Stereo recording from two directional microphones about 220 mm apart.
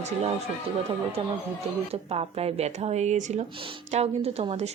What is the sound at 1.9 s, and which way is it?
A woman's voice, 30° right (ahead or behind).